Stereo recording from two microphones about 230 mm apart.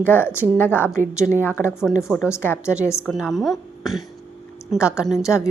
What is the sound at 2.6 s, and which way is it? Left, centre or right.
A woman's voice, centre.